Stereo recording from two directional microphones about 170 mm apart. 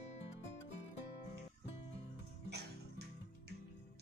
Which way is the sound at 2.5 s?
75° right (ahead or behind).